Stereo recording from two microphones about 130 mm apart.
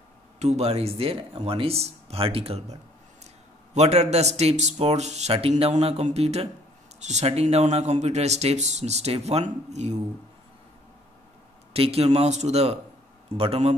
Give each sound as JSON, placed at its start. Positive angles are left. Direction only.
{"t": 0.4, "sound": "speech", "side_deg": -55}
{"t": 11.7, "sound": "speech", "side_deg": -50}